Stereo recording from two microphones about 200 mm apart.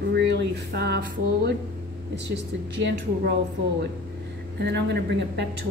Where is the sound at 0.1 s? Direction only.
60° right (ahead or behind).